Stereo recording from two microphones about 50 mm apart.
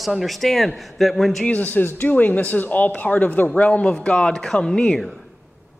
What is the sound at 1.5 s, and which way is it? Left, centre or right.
Speech, left.